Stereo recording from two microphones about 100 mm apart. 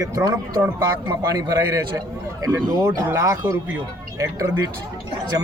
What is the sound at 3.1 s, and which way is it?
Speech, 30° right (ahead or behind).